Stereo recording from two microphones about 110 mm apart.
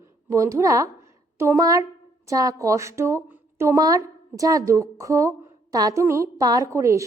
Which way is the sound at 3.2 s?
20° right (ahead or behind).